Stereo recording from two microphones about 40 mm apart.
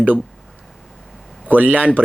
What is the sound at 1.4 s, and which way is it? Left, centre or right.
Speech, right.